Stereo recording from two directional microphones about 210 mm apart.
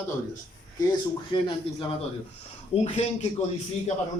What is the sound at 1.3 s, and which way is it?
A man's voice, 20° left (ahead or behind).